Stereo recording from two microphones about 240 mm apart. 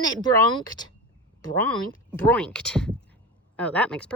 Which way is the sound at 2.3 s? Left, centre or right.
Centre.